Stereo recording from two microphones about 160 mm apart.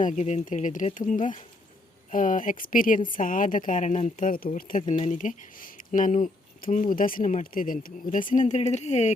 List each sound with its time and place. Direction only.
0.0 s speech: 50° left (ahead or behind)
4.9 s speech: 50° left (ahead or behind)